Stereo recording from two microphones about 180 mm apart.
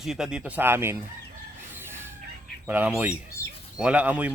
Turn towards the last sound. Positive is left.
turn(degrees=-10)  # may be behind; listen again after turning